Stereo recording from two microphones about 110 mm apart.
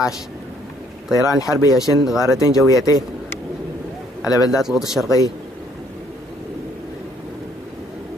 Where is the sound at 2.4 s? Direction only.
35° left (ahead or behind).